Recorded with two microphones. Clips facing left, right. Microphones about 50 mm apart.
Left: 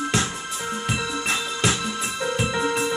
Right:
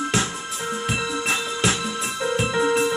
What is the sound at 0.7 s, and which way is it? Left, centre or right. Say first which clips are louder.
Music: right 2 dB; centre.